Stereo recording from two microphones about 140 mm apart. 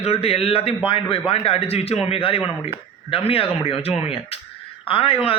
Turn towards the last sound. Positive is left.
turn(degrees=40)  # may be behind; listen again after turning